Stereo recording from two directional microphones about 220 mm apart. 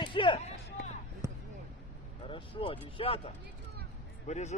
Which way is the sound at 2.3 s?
25° left (ahead or behind).